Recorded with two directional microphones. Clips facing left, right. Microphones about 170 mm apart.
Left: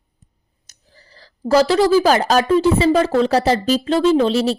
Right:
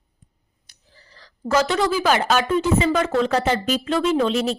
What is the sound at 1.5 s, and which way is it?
Speech, 35° left (ahead or behind).